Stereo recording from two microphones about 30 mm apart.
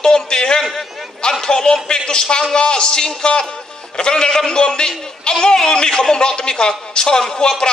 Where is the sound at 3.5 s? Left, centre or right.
Left.